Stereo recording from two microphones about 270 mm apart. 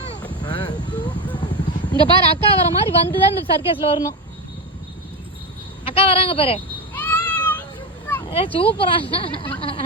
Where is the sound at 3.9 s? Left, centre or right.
Centre.